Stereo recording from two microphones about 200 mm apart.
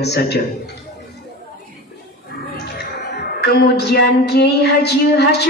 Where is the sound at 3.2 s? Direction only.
55° left (ahead or behind).